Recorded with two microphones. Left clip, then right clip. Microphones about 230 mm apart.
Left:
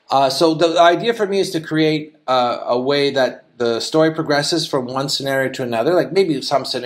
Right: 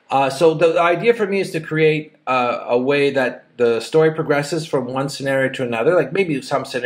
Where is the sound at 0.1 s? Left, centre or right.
Left.